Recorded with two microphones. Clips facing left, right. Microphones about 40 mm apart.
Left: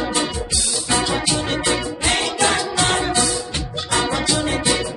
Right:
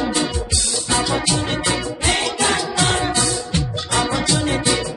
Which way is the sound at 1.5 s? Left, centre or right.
Left.